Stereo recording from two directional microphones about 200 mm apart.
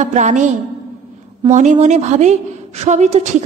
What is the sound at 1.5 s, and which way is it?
A woman's voice, 35° right (ahead or behind).